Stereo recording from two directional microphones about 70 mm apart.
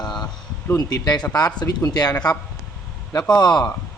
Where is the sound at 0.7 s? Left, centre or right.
Left.